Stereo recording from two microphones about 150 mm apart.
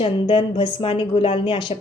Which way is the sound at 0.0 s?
35° left (ahead or behind).